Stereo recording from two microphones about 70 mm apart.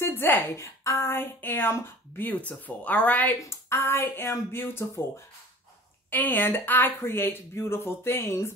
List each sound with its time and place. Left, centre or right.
0.0 s music: left
0.5 s a woman's voice: left
3.3 s speech: left
6.0 s speech: left